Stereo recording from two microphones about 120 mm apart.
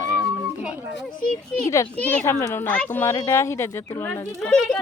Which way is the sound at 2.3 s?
25° left (ahead or behind).